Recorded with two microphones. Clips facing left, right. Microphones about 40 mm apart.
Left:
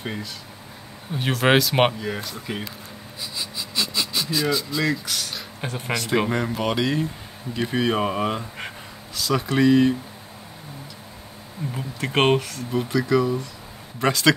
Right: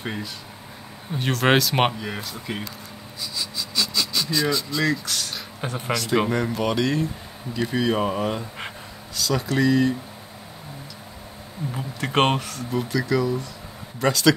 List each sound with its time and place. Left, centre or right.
0.0 s speech: centre
1.1 s speech: centre
3.2 s a sound: left; by 5.9 s centre
6.1 s speech: centre; by 9.9 s left
12.1 s speech: centre